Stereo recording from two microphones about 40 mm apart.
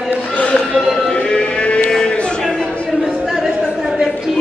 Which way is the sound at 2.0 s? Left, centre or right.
Left.